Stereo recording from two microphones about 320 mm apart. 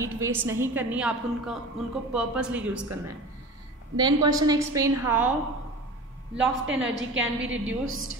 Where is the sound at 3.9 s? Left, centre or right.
Centre.